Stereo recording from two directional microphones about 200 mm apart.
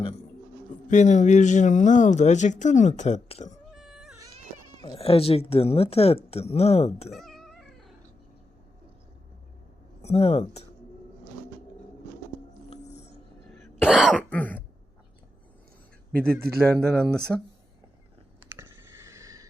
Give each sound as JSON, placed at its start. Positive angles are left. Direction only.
{"t": 0.9, "sound": "speech", "side_deg": 35}
{"t": 3.8, "sound": "a sound", "side_deg": 0}
{"t": 4.8, "sound": "speech", "side_deg": 30}
{"t": 7.1, "sound": "cat", "side_deg": 0}
{"t": 10.0, "sound": "speech", "side_deg": 30}
{"t": 13.5, "sound": "cough", "side_deg": 10}
{"t": 13.9, "sound": "cough", "side_deg": 0}
{"t": 16.1, "sound": "a man's voice", "side_deg": -45}
{"t": 16.6, "sound": "speech", "side_deg": 5}
{"t": 18.4, "sound": "a sound", "side_deg": -10}